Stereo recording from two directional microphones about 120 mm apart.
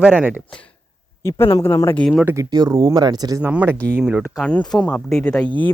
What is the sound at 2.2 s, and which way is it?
Speech, 25° right (ahead or behind).